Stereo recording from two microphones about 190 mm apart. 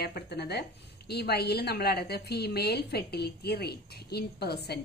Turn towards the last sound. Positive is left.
turn(degrees=60)  # may be behind; listen again after turning